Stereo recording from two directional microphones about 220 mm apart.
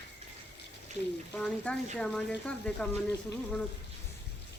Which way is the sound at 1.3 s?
5° left (ahead or behind).